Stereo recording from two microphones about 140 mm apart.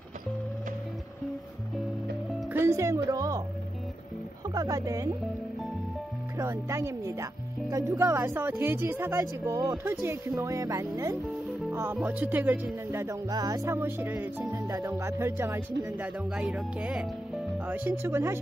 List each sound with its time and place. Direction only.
2.5 s speech: 20° right (ahead or behind)
4.6 s speech: 25° right (ahead or behind)
6.3 s speech: 20° right (ahead or behind)
16.3 s speech: 5° right (ahead or behind)